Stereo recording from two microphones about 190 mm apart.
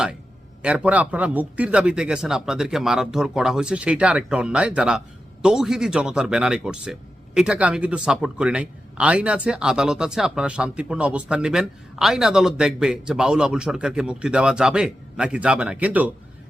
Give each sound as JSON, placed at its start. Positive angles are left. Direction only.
{"t": 0.6, "sound": "speech", "side_deg": -5}